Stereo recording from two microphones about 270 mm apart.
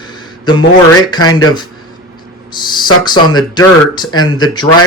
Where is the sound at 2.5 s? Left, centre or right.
Centre.